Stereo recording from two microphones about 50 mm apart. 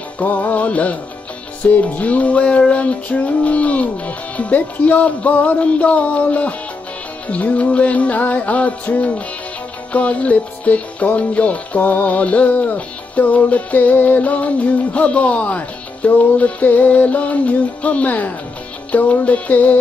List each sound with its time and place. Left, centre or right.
0.2 s music: left